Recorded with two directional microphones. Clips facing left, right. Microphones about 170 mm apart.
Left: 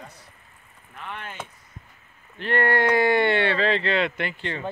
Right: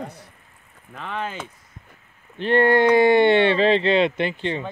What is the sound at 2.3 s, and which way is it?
Speech, 20° right (ahead or behind).